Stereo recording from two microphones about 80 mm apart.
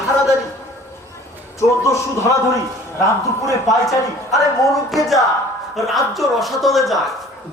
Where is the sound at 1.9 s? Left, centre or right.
Left.